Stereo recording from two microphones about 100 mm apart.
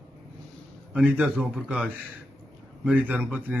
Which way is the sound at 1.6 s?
15° right (ahead or behind).